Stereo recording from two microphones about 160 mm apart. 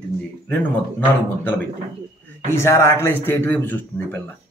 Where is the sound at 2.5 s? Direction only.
15° left (ahead or behind).